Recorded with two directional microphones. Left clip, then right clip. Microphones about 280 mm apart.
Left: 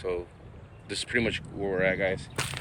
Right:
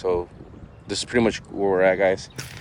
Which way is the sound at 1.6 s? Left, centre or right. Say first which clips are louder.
Right 9 dB; right.